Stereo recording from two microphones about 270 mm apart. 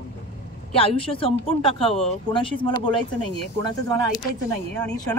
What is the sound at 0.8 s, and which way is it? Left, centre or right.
Speech, left.